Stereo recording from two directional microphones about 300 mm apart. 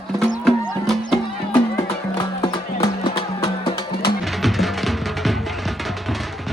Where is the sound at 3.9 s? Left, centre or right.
Left.